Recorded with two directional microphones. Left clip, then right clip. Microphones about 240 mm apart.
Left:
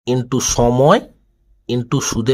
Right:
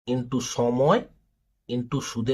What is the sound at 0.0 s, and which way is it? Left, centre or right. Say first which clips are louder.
Speech: left 10 dB; left.